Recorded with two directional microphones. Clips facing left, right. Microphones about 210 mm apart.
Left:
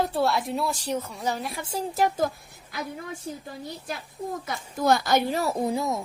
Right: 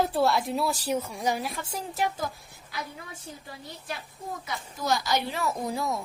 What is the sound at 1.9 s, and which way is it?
Speech, 40° left (ahead or behind).